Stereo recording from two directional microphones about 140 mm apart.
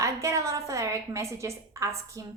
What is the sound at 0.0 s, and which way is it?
A woman's voice, 20° right (ahead or behind).